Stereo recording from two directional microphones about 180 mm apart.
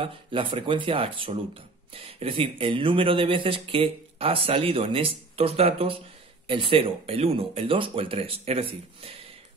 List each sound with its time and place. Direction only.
0.0 s speech: 30° right (ahead or behind)